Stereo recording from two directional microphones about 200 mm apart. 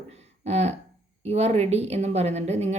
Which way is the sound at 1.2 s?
30° right (ahead or behind).